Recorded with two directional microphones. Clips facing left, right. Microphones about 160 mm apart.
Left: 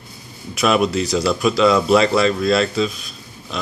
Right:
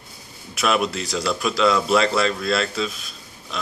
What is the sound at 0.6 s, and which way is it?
A man's voice, centre (ahead or behind).